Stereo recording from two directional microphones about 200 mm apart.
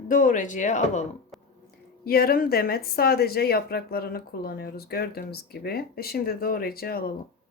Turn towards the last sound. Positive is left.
turn(degrees=50)  # may be behind; listen again after turning